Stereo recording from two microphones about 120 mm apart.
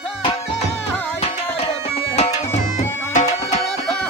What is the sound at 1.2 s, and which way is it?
Music, 55° left (ahead or behind).